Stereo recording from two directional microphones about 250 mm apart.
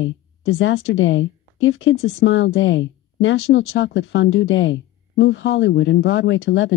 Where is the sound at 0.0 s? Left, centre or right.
Left.